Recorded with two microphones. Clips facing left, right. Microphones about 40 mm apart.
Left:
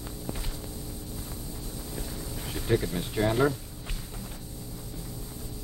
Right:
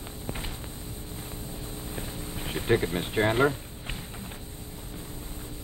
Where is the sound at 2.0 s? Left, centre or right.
Right.